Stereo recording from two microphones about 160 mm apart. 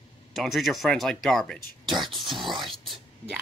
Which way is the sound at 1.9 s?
30° right (ahead or behind).